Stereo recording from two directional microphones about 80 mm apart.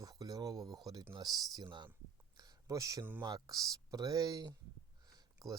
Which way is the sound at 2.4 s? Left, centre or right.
Right.